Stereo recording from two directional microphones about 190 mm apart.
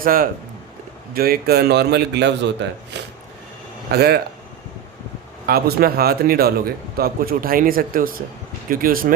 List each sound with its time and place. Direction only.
0.0 s a man's voice: 50° right (ahead or behind); by 2.5 s 65° right (ahead or behind)
3.9 s a man's voice: 55° right (ahead or behind)
5.5 s a man's voice: 55° right (ahead or behind)